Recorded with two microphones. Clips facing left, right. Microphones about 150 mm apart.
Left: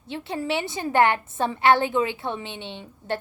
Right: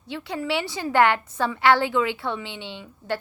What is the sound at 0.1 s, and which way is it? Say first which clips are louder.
A woman's voice: even; 25° left (ahead or behind).